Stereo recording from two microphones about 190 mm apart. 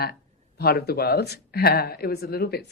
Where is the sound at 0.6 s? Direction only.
55° left (ahead or behind).